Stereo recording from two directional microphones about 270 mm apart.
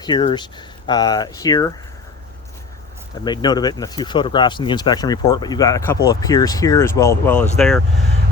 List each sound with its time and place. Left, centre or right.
0.0 s speech: centre
3.2 s speech: centre